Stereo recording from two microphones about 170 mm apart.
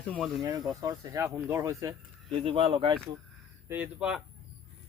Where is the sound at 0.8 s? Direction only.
20° right (ahead or behind).